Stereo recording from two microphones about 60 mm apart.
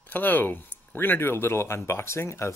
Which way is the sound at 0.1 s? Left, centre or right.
Left.